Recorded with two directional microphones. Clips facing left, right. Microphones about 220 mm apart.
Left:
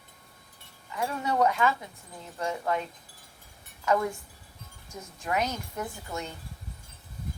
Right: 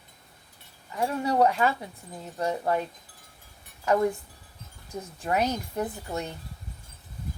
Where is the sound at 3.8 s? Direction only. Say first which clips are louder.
Right 3 dB; 35° right (ahead or behind).